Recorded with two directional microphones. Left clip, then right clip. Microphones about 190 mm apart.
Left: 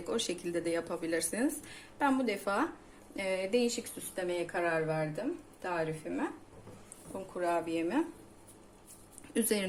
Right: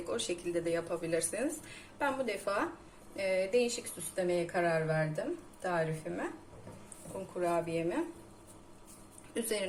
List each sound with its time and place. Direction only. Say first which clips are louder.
0.1 s speech: left 1 dB; 50° left (ahead or behind); by 6.2 s 25° left (ahead or behind)
7.4 s speech: even; 45° left (ahead or behind)
9.3 s speech: left 3 dB; 50° left (ahead or behind)